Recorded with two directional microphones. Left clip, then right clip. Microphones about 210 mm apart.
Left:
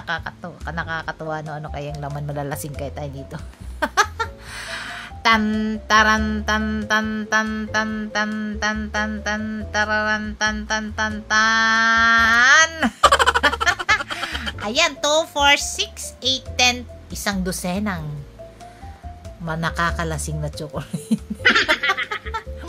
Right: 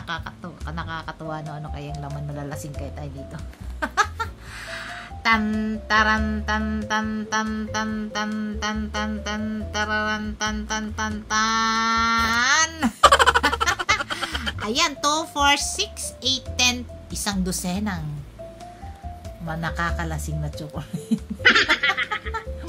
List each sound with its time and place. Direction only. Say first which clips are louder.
0.0 s music: left 5 dB; 25° left (ahead or behind)
1.5 s speech: left 5 dB; 30° left (ahead or behind); by 6.8 s 45° left (ahead or behind)
6.9 s music: left 5 dB; 40° left (ahead or behind); by 12.9 s 20° left (ahead or behind)
13.0 s a sound: even; centre (ahead or behind)
13.9 s snicker: left 2 dB; centre (ahead or behind)
14.6 s a woman's voice: left 3 dB; 15° left (ahead or behind)
19.4 s speech: left 5 dB; 50° left (ahead or behind)
21.4 s snicker: even; centre (ahead or behind)